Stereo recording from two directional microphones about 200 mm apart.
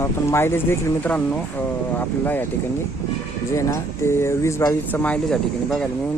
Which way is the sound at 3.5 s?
15° left (ahead or behind).